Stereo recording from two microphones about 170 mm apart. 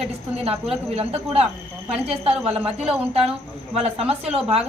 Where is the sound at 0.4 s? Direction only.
35° right (ahead or behind).